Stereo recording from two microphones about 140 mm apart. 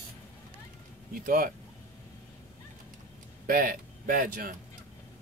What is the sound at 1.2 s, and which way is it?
Speech, 90° right.